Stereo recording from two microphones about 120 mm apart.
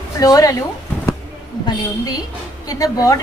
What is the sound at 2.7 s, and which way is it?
Speech, 30° left (ahead or behind).